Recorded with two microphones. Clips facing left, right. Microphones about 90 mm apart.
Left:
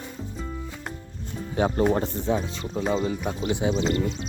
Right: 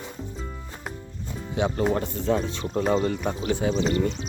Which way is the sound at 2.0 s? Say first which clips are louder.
Left 1 dB; 25° left (ahead or behind).